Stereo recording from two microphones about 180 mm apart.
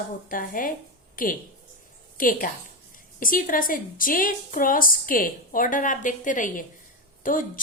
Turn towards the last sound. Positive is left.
turn(degrees=50)  # may be behind; listen again after turning